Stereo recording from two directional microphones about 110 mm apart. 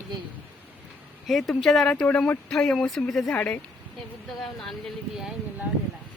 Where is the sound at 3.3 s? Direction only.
15° left (ahead or behind).